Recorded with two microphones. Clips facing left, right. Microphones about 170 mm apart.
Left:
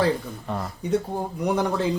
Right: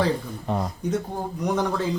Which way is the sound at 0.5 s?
20° right (ahead or behind).